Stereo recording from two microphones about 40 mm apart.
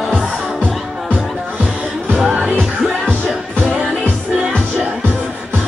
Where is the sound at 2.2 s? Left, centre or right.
Centre.